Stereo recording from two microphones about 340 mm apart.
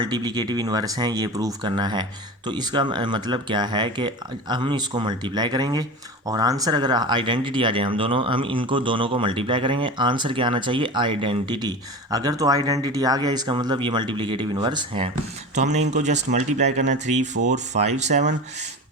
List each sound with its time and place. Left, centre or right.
0.0 s speech: centre